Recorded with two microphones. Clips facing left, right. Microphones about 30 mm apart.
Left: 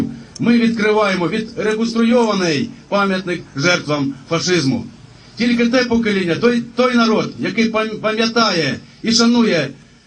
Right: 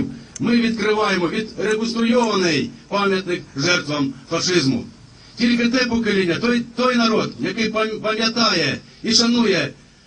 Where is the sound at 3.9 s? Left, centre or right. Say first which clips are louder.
Left 3 dB; left.